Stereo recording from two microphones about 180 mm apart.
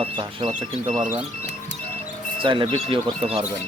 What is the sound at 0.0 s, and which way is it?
Speech, 30° right (ahead or behind).